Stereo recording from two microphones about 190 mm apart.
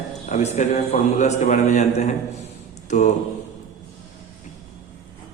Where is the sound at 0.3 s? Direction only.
40° left (ahead or behind).